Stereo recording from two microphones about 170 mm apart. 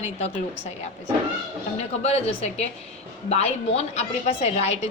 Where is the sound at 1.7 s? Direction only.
40° left (ahead or behind).